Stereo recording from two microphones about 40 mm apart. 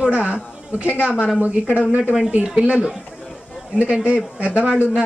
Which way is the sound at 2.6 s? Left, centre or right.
Right.